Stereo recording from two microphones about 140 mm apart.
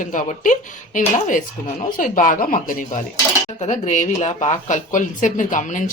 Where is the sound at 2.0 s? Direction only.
70° left (ahead or behind).